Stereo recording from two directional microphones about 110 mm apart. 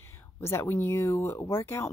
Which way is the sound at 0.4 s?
25° left (ahead or behind).